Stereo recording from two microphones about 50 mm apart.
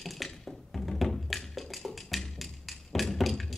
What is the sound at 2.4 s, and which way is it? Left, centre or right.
Music, centre.